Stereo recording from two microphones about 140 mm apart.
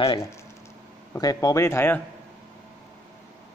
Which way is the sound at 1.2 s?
25° left (ahead or behind).